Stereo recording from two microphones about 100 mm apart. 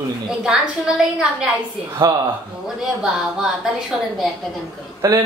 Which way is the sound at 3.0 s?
5° right (ahead or behind).